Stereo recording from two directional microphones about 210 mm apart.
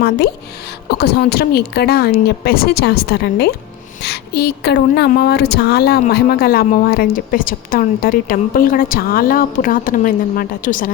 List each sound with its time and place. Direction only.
0.9 s a woman's voice: 50° left (ahead or behind)